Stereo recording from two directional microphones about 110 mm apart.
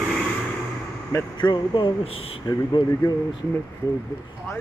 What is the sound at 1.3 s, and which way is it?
Speech, 45° left (ahead or behind).